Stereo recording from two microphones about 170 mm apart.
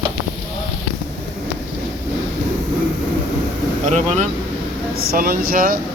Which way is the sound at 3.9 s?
45° right (ahead or behind).